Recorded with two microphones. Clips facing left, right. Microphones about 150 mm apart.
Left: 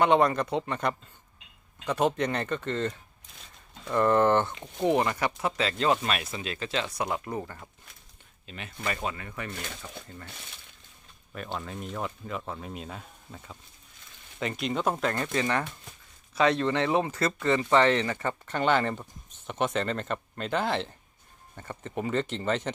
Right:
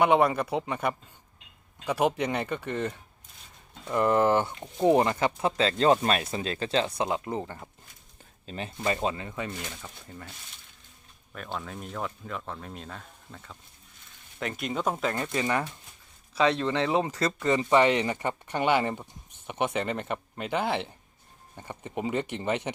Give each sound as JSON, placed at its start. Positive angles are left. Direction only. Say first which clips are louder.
{"t": 0.0, "sound": "speech", "louder": "even", "side_deg": -10}
{"t": 4.8, "sound": "speech", "louder": "right 3 dB", "side_deg": -30}
{"t": 11.3, "sound": "speech", "louder": "left 1 dB", "side_deg": 0}
{"t": 14.3, "sound": "speech", "louder": "left 1 dB", "side_deg": 0}
{"t": 15.1, "sound": "speech", "louder": "even", "side_deg": -15}
{"t": 16.7, "sound": "speech", "louder": "even", "side_deg": -25}